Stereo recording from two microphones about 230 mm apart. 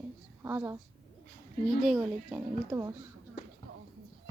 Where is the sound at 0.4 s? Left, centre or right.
Centre.